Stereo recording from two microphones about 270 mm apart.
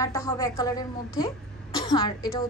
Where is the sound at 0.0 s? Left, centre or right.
Centre.